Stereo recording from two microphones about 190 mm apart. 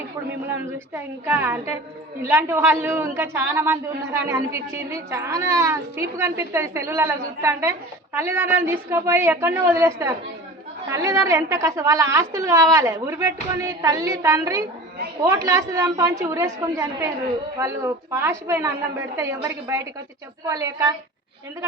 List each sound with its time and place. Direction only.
0.4 s a woman's voice: 10° right (ahead or behind)